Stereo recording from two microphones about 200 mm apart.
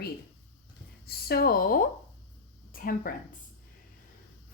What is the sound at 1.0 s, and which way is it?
A woman's voice, 50° left (ahead or behind).